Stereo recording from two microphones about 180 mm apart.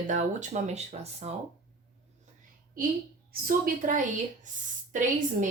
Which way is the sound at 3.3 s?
55° right (ahead or behind).